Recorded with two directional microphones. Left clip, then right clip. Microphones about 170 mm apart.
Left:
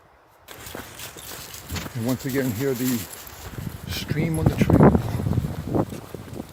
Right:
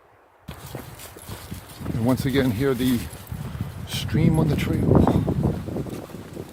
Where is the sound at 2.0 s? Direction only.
25° right (ahead or behind).